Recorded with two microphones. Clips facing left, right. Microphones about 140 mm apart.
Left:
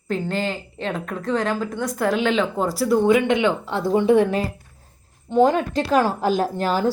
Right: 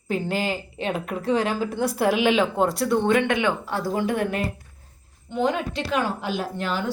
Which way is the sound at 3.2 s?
20° left (ahead or behind).